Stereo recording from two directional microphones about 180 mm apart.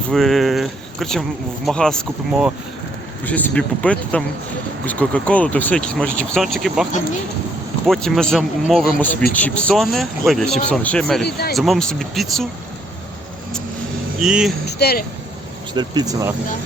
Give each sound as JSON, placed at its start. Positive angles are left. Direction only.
{"t": 0.1, "sound": "speech", "side_deg": 0}
{"t": 7.9, "sound": "speech", "side_deg": 5}
{"t": 14.2, "sound": "speech", "side_deg": 0}
{"t": 14.8, "sound": "speech", "side_deg": 60}
{"t": 15.7, "sound": "speech", "side_deg": -25}